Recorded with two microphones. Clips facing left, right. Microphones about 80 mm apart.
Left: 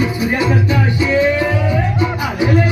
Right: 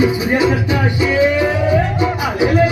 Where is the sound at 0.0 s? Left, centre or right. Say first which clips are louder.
Right 3 dB; centre.